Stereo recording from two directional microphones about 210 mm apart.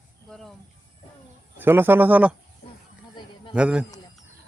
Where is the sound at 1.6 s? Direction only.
10° right (ahead or behind).